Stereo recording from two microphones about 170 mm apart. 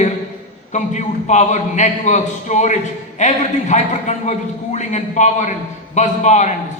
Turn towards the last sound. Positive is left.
turn(degrees=45)  # may be behind; listen again after turning